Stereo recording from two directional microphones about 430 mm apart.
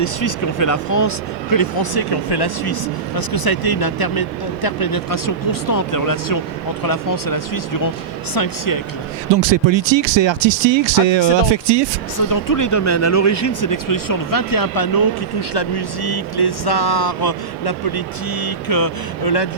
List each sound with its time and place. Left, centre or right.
0.0 s speech: left
9.3 s speech: right
12.3 s speech: left